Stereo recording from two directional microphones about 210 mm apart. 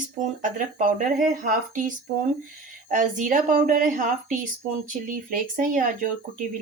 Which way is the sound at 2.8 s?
40° right (ahead or behind).